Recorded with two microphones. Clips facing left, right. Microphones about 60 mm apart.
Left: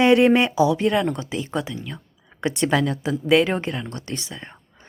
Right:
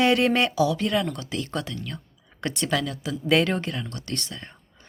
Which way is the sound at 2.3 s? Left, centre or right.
Centre.